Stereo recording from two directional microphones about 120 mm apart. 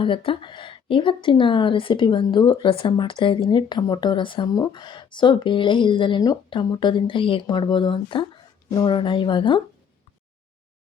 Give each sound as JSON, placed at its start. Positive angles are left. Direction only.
{"t": 0.0, "sound": "a woman's voice", "side_deg": 45}
{"t": 4.4, "sound": "a woman's voice", "side_deg": 30}